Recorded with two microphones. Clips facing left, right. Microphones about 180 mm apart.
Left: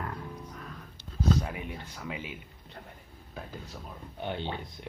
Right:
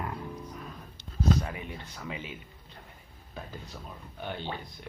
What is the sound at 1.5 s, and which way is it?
Speech, 10° left (ahead or behind).